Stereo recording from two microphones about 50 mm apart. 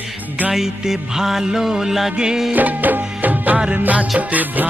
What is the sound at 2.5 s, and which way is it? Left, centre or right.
Music, right.